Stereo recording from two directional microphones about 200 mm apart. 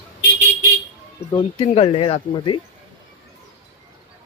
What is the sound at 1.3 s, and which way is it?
Speech, 25° left (ahead or behind).